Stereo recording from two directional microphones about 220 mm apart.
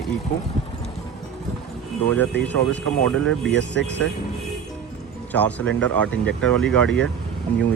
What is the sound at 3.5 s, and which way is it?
Speech, 55° left (ahead or behind).